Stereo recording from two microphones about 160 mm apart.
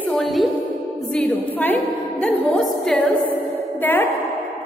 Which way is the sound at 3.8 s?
10° left (ahead or behind).